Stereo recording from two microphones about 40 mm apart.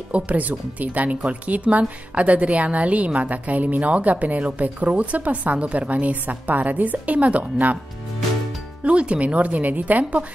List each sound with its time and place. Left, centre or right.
0.1 s speech: right
8.8 s speech: right